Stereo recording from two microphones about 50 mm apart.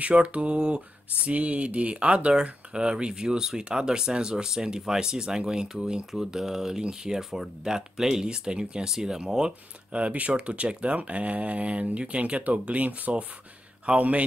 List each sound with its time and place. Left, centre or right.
0.0 s speech: right
9.9 s speech: right